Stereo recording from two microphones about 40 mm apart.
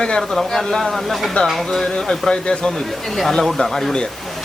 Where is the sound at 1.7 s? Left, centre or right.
Centre.